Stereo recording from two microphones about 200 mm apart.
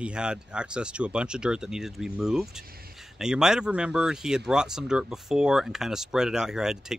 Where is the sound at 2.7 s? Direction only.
50° right (ahead or behind).